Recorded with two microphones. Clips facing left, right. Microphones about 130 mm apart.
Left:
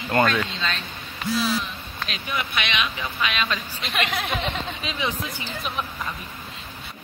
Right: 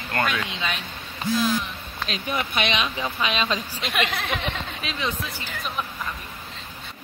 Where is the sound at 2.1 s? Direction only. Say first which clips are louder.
Right 2 dB; 35° right (ahead or behind).